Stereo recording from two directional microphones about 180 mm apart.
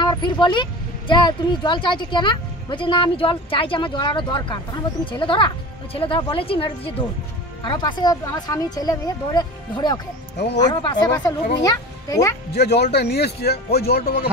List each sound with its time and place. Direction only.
0.0 s a woman's voice: 25° left (ahead or behind)
10.3 s speech: 70° left (ahead or behind)
10.6 s a child's voice: 25° left (ahead or behind)
12.5 s speech: 65° left (ahead or behind)